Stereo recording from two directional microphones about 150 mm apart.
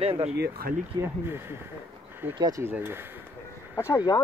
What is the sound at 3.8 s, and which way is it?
Speech, 20° left (ahead or behind).